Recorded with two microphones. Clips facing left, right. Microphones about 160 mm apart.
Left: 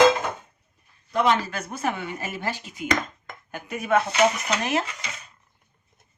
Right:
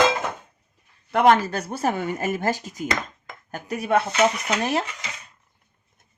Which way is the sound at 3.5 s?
40° right (ahead or behind).